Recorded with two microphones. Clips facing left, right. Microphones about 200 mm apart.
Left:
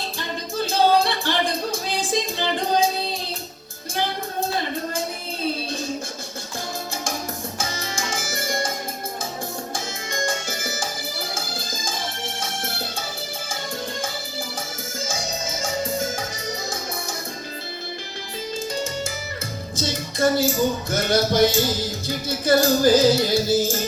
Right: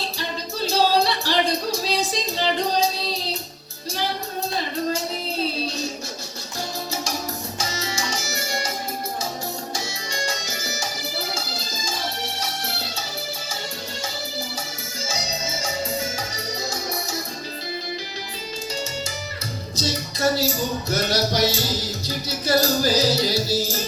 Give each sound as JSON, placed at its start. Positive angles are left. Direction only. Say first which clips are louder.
{"t": 0.2, "sound": "singing", "louder": "left 3 dB", "side_deg": 55}
{"t": 7.6, "sound": "music", "louder": "right 2 dB", "side_deg": 50}
{"t": 9.7, "sound": "music", "louder": "left 1 dB", "side_deg": 50}
{"t": 15.6, "sound": "music", "louder": "left 3 dB", "side_deg": 50}
{"t": 19.7, "sound": "music", "louder": "even", "side_deg": 50}